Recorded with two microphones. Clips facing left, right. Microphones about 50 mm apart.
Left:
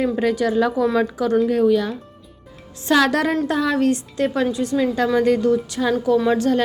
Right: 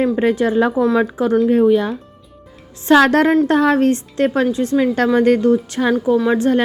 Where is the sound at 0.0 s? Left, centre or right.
Right.